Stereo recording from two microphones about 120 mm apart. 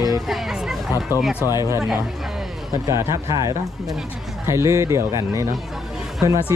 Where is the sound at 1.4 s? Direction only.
35° left (ahead or behind).